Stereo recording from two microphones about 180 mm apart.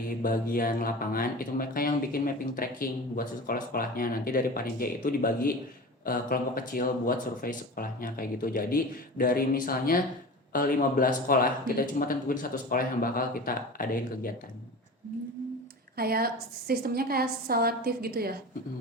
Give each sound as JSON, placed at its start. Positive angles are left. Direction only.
{"t": 0.2, "sound": "speech", "side_deg": 50}
{"t": 16.0, "sound": "a woman's voice", "side_deg": -55}